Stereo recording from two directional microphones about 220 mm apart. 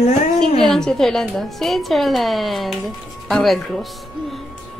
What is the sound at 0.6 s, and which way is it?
A woman's voice, centre (ahead or behind).